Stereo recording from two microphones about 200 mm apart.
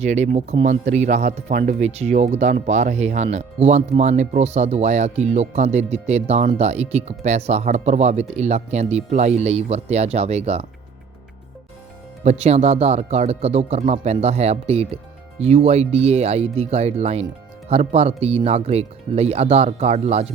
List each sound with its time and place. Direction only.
0.0 s speech: 35° right (ahead or behind)
12.2 s speech: 35° right (ahead or behind)